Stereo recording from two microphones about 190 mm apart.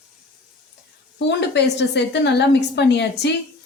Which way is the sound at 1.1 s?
65° left (ahead or behind).